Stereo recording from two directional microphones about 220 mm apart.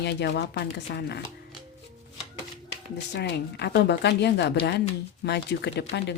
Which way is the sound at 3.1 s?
50° left (ahead or behind).